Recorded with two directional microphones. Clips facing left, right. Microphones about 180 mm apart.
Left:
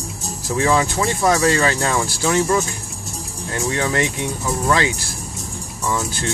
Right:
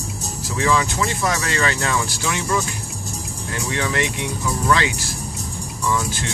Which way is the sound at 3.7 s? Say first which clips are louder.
Left 2 dB; 40° left (ahead or behind).